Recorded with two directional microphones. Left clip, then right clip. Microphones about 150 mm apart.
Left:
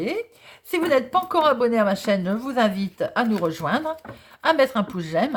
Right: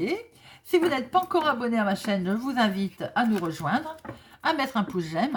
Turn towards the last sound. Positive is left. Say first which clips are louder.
# left 4 dB
turn(degrees=30)  # may be behind; listen again after turning